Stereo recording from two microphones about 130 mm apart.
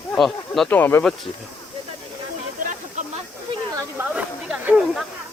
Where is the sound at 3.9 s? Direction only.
10° right (ahead or behind).